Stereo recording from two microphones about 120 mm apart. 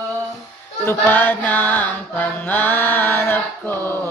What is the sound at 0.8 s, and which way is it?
Mantra, 15° left (ahead or behind).